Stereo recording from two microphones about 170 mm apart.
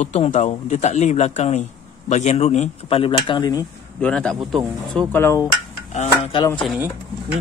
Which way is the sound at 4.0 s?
5° left (ahead or behind).